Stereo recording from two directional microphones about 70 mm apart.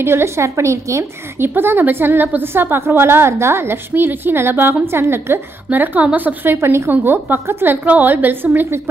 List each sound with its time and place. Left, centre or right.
0.0 s a woman's voice: right
1.5 s a woman's voice: right
5.7 s a woman's voice: right